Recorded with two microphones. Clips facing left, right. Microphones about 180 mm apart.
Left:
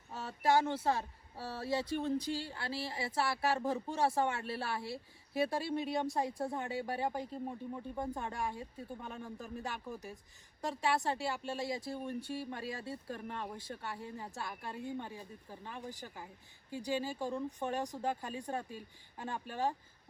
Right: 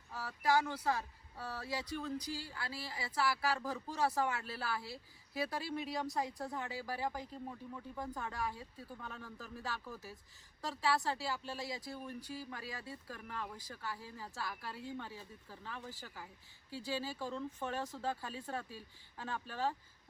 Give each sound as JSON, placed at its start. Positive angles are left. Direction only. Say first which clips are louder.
{"t": 0.1, "sound": "speech", "louder": "left 3 dB", "side_deg": 25}